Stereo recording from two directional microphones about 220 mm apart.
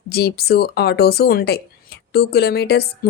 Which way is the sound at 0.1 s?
45° left (ahead or behind).